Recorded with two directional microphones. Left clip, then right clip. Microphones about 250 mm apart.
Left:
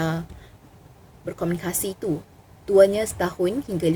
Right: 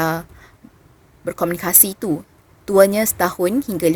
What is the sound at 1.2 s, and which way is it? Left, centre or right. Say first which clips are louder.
A woman's voice: right 7 dB; right.